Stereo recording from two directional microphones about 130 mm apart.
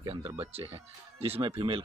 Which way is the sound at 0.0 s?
45° right (ahead or behind).